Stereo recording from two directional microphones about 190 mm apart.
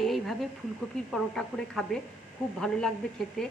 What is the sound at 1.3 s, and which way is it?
A woman's voice, centre (ahead or behind).